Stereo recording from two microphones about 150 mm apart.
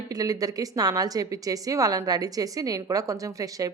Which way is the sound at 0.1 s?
25° right (ahead or behind).